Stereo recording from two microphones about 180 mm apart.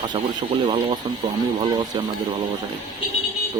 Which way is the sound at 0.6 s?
30° right (ahead or behind).